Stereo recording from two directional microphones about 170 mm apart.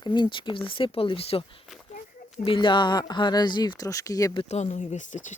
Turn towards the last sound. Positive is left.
turn(degrees=45)  # may be behind; listen again after turning